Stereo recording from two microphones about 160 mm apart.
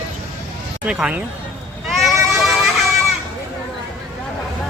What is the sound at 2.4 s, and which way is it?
Vehicle, centre (ahead or behind).